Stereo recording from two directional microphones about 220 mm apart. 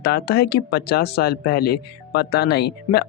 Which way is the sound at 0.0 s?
45° left (ahead or behind).